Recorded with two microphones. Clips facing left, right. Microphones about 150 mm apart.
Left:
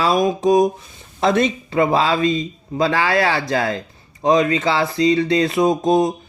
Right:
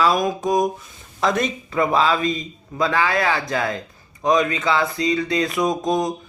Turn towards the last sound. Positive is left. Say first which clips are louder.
# left 5 dB
turn(degrees=30)  # may be behind; listen again after turning